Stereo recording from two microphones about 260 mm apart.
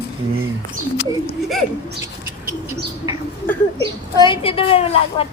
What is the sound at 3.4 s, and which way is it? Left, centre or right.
Speech, centre.